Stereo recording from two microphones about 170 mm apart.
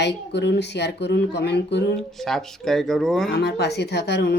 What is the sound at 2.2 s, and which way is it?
Speech, centre (ahead or behind).